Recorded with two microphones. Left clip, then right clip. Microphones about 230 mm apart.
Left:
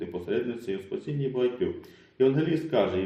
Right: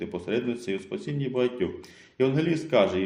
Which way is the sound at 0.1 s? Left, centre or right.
Right.